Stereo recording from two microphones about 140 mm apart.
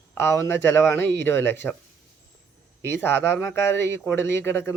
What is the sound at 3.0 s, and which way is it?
Speech, 15° left (ahead or behind).